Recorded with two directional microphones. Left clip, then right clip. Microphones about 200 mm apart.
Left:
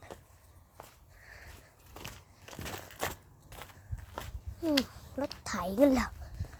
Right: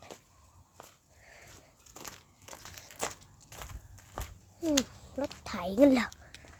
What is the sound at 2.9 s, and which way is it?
Walk, 20° left (ahead or behind).